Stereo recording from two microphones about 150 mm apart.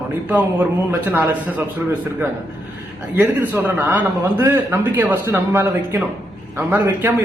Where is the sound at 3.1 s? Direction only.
10° right (ahead or behind).